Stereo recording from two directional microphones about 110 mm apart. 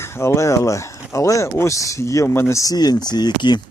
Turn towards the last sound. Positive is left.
turn(degrees=40)  # may be behind; listen again after turning